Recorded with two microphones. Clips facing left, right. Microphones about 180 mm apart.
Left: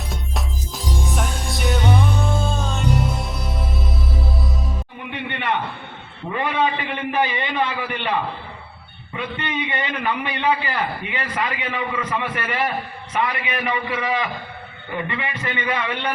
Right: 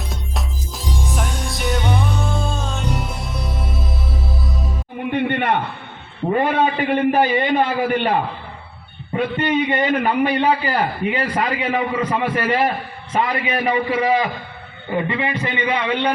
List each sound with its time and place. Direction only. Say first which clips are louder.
0.1 s music: even; centre (ahead or behind)
5.1 s a sound: right 6 dB; 50° right (ahead or behind)
6.2 s a man's voice: right 5 dB; 45° right (ahead or behind); by 16.1 s 20° right (ahead or behind)